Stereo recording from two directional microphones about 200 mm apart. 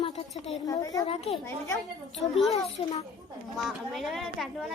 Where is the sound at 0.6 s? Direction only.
20° left (ahead or behind).